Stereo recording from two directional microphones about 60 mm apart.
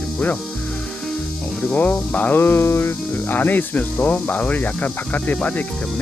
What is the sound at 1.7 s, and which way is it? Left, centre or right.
Speech, left.